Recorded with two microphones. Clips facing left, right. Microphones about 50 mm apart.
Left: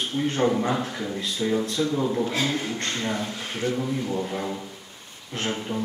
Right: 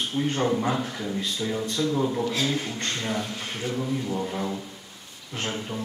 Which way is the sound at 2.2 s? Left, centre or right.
Left.